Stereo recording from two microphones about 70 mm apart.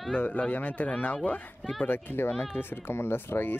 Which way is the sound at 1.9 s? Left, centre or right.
Left.